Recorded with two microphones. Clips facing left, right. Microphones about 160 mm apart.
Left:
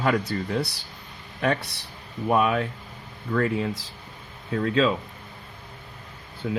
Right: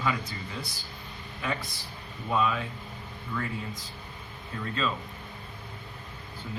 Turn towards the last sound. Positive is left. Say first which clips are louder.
# left 11 dB
turn(degrees=65)  # may be behind; listen again after turning